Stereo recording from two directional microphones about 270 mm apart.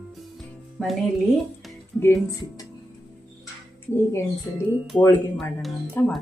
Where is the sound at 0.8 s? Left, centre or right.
Centre.